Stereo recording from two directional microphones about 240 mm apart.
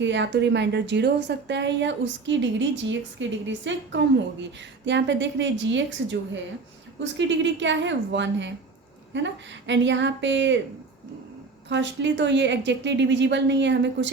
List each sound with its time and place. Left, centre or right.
0.0 s speech: right
11.7 s speech: right